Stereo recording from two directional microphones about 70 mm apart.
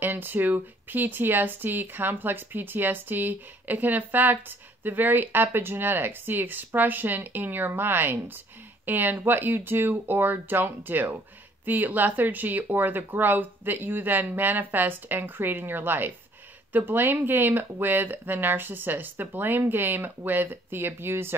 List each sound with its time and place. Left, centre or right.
0.0 s speech: right